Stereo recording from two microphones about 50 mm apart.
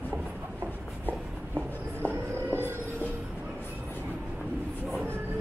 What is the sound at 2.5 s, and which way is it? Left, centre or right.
Train, right.